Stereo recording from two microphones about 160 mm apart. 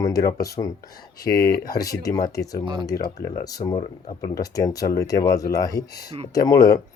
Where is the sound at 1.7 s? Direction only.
20° left (ahead or behind).